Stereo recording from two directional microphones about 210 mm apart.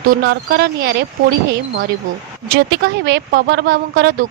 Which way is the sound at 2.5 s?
50° right (ahead or behind).